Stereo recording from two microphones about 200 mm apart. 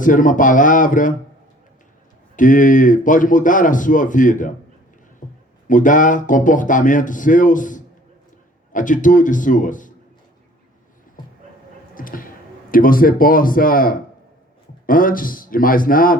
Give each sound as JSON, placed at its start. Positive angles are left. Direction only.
{"t": 0.0, "sound": "speech", "side_deg": 40}
{"t": 2.3, "sound": "speech", "side_deg": 40}
{"t": 5.2, "sound": "a sound", "side_deg": 40}
{"t": 5.6, "sound": "speech", "side_deg": 40}
{"t": 11.9, "sound": "a sound", "side_deg": 45}
{"t": 12.7, "sound": "speech", "side_deg": 45}